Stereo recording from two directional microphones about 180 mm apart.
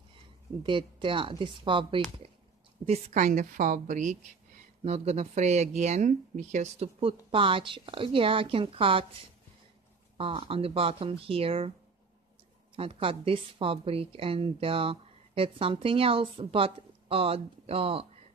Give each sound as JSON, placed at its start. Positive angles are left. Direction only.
{"t": 0.7, "sound": "speech", "side_deg": -30}
{"t": 2.8, "sound": "a woman's voice", "side_deg": -40}
{"t": 10.1, "sound": "a woman's voice", "side_deg": -30}
{"t": 12.7, "sound": "a woman's voice", "side_deg": -30}